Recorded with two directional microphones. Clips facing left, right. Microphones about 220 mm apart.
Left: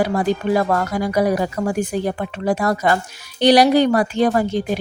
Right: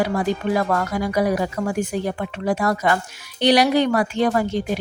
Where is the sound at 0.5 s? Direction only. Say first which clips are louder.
Left 3 dB; 35° left (ahead or behind).